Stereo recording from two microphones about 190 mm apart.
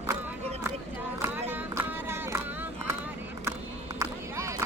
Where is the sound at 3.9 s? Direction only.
15° right (ahead or behind).